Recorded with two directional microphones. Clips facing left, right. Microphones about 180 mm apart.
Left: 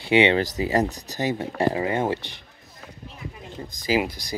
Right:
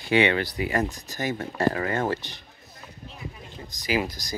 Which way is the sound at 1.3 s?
20° left (ahead or behind).